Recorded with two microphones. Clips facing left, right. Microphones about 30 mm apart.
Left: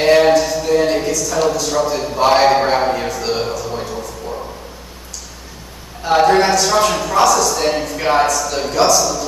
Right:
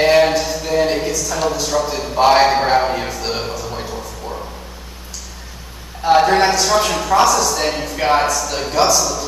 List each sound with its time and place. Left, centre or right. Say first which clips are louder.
0.0 s a man's voice: left 2 dB; centre
6.0 s a man's voice: even; centre